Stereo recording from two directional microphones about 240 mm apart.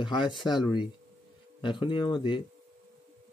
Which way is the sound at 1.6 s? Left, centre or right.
Centre.